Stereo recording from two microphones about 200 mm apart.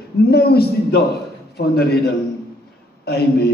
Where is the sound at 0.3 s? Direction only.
50° left (ahead or behind).